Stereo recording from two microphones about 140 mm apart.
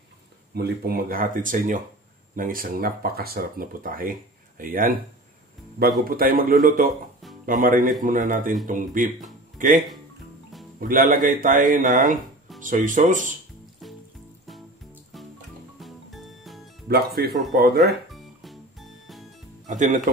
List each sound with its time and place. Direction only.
0.8 s speech: 90° right; by 1.8 s 70° right (ahead or behind)
2.3 s speech: 85° right
6.0 s speech: 90° right
7.4 s speech: 75° right (ahead or behind)
10.8 s speech: 85° right; by 13.3 s 65° right (ahead or behind)
15.8 s music: centre (ahead or behind)
16.8 s speech: 90° right
17.7 s music: centre (ahead or behind)
19.7 s speech: 60° right (ahead or behind)